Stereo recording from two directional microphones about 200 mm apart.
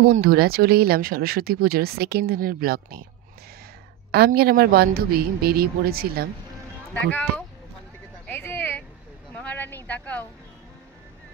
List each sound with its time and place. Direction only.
0.0 s speech: 45° right (ahead or behind)
4.1 s speech: 50° right (ahead or behind)
6.9 s speech: 5° left (ahead or behind)
8.3 s a sound: 10° left (ahead or behind)